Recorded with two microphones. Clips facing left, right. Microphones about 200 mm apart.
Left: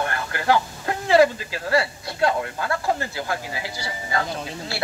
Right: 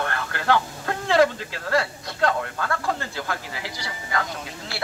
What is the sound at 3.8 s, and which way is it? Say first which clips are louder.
Speech: left 2 dB; 30° left (ahead or behind).